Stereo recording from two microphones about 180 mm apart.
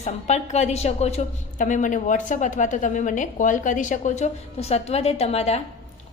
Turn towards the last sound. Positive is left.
turn(degrees=35)  # may be behind; listen again after turning